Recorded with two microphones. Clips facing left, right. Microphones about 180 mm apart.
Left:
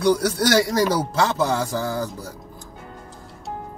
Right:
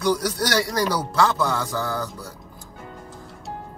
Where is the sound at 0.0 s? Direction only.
25° left (ahead or behind).